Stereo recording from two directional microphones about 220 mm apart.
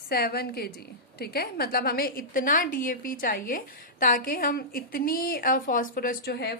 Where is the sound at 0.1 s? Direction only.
45° left (ahead or behind).